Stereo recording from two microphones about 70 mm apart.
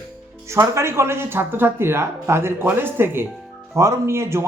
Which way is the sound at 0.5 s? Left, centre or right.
Right.